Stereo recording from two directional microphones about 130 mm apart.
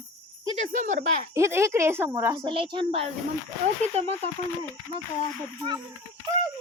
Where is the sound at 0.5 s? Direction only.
80° right.